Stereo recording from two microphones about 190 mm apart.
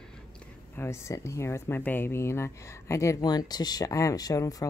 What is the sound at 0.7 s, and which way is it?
Speech, 15° left (ahead or behind).